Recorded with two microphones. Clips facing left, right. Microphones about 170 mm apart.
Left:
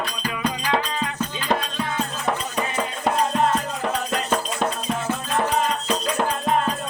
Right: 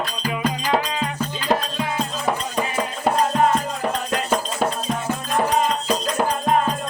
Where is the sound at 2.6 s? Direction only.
10° right (ahead or behind).